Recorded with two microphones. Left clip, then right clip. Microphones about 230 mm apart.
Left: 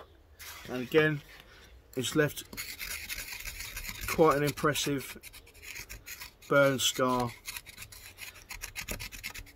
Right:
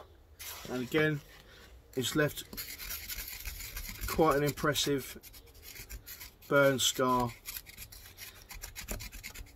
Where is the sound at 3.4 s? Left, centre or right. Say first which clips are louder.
Left 4 dB; centre.